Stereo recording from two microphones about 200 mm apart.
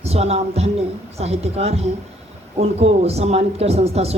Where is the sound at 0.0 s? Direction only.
30° right (ahead or behind).